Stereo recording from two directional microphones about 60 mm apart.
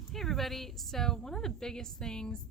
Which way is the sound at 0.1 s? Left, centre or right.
Centre.